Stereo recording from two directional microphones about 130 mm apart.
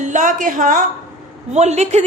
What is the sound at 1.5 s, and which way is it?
Speech, 55° right (ahead or behind).